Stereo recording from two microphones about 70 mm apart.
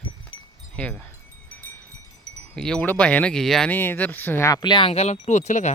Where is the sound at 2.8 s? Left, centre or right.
Left.